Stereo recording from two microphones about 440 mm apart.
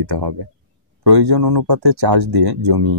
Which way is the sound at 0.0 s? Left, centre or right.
Right.